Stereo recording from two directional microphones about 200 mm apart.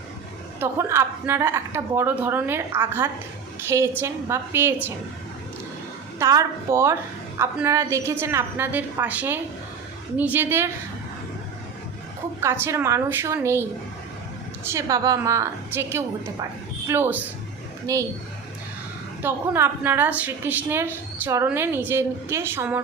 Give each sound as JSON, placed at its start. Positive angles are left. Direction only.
{"t": 0.6, "sound": "a woman's voice", "side_deg": -15}
{"t": 6.1, "sound": "a woman's voice", "side_deg": -15}
{"t": 12.4, "sound": "a woman's voice", "side_deg": -15}
{"t": 19.2, "sound": "a woman's voice", "side_deg": -10}